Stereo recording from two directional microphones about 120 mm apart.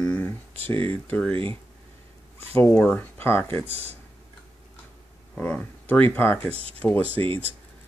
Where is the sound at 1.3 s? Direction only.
50° right (ahead or behind).